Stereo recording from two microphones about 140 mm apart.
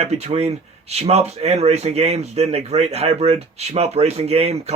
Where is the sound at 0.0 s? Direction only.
50° right (ahead or behind).